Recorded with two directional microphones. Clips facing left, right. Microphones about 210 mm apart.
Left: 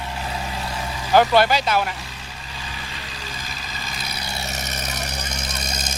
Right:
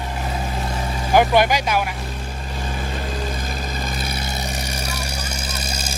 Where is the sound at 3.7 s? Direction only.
50° right (ahead or behind).